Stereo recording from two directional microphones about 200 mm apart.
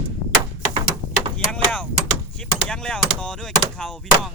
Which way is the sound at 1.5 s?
5° left (ahead or behind).